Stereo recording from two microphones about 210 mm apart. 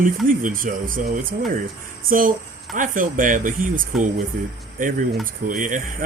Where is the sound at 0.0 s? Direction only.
40° right (ahead or behind).